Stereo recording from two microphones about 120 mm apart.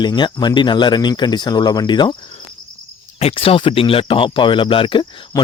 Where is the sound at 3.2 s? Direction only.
55° left (ahead or behind).